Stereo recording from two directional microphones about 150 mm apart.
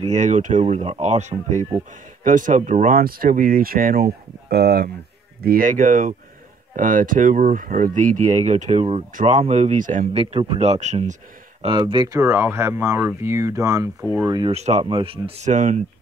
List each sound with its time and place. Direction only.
0.1 s speech: 55° right (ahead or behind); by 4.9 s 90° right
5.4 s speech: 80° right; by 10.0 s 60° right (ahead or behind)
10.3 s speech: 45° right (ahead or behind)
11.6 s speech: 35° right (ahead or behind)
12.2 s speech: 15° right (ahead or behind)
14.5 s speech: 45° right (ahead or behind)